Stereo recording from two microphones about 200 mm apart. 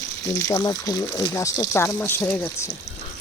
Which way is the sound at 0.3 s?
15° left (ahead or behind).